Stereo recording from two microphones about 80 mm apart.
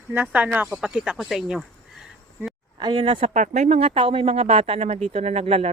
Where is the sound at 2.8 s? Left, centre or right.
Right.